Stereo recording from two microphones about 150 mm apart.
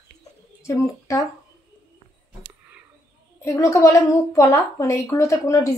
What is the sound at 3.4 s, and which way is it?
A woman's voice, 20° left (ahead or behind).